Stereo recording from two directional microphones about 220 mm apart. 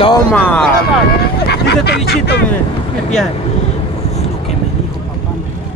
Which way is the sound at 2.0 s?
50° left (ahead or behind).